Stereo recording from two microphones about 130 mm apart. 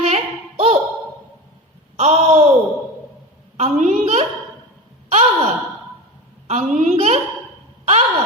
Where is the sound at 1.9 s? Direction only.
60° right (ahead or behind).